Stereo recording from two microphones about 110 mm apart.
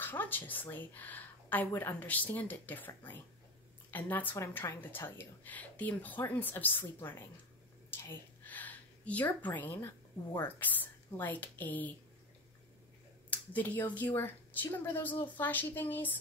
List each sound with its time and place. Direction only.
0.0 s speech: 20° left (ahead or behind)
13.3 s speech: 15° left (ahead or behind)